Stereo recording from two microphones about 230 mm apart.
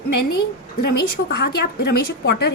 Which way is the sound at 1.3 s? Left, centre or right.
Left.